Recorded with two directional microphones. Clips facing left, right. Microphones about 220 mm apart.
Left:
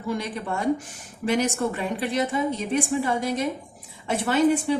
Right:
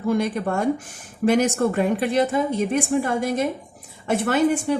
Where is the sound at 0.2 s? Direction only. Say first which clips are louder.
Right 6 dB; 50° right (ahead or behind).